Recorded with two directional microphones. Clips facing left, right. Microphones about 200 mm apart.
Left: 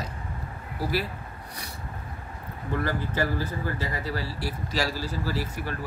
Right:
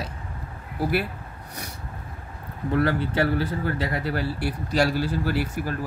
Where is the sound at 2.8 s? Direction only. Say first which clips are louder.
Right 5 dB; 70° right (ahead or behind).